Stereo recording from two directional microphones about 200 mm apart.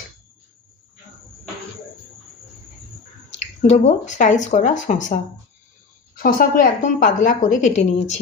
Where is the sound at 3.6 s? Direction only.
35° left (ahead or behind).